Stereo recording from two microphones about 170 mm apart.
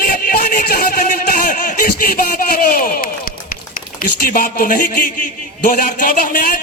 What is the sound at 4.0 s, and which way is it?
A man's voice, 55° left (ahead or behind).